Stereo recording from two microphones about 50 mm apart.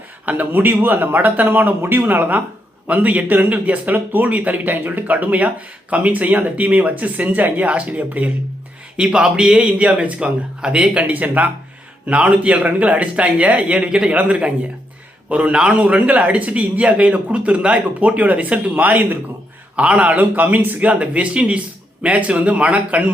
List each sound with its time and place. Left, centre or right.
0.3 s speech: right
9.0 s a man's voice: centre
15.5 s a man's voice: centre
15.8 s a man's voice: right
19.7 s a man's voice: right